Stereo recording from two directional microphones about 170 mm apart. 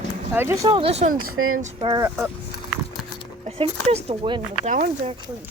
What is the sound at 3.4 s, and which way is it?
Speech, 35° right (ahead or behind).